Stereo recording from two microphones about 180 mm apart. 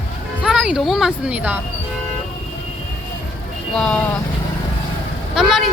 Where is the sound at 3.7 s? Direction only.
5° left (ahead or behind).